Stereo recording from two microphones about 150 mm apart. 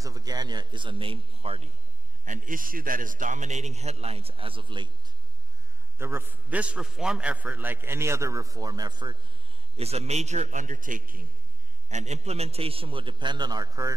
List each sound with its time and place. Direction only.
0.0 s a man's voice: 25° right (ahead or behind); by 1.7 s 40° right (ahead or behind)
2.2 s a man's voice: 60° right (ahead or behind); by 4.9 s 35° right (ahead or behind)
5.9 s a man's voice: 15° right (ahead or behind)
9.8 s a man's voice: 45° right (ahead or behind); by 11.2 s 70° right (ahead or behind)
11.9 s a man's voice: 50° right (ahead or behind); by 13.9 s 25° right (ahead or behind)